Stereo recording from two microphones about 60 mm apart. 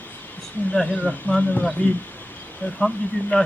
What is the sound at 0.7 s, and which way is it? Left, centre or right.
Speech, centre.